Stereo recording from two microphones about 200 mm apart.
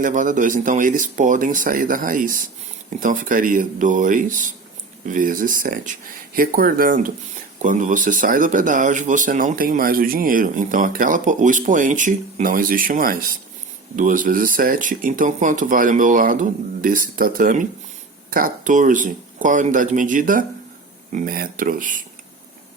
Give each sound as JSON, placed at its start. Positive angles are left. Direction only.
{"t": 0.0, "sound": "speech", "side_deg": -40}